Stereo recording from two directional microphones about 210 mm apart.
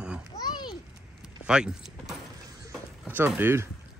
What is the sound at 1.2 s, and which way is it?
Keys jangling, 5° right (ahead or behind).